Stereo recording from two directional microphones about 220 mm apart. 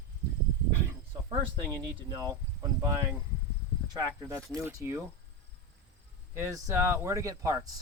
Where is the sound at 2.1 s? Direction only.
15° right (ahead or behind).